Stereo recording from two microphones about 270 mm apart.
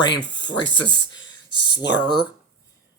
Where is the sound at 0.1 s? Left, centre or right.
Left.